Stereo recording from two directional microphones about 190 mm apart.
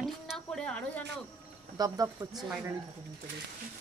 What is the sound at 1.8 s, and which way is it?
Speech, 20° right (ahead or behind).